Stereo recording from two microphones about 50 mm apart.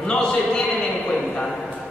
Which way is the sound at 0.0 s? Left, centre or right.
Centre.